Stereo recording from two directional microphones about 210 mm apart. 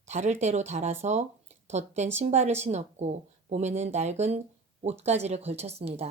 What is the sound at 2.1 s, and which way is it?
A woman's voice, 30° right (ahead or behind).